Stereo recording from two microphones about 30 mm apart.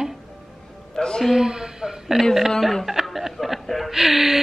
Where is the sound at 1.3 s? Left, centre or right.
Right.